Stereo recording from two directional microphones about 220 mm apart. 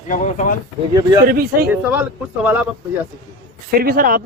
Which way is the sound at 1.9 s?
5° right (ahead or behind).